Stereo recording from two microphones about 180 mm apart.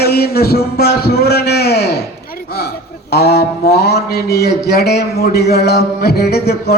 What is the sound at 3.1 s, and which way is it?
Speech, 60° left (ahead or behind).